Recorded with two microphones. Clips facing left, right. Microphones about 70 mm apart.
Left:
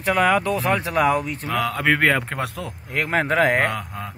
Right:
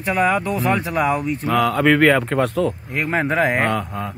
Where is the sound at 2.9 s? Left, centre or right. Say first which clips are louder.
Right 1 dB; left.